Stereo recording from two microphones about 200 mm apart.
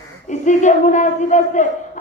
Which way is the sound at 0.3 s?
40° left (ahead or behind).